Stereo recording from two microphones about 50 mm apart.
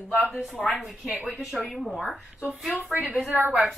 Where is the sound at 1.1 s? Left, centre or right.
Right.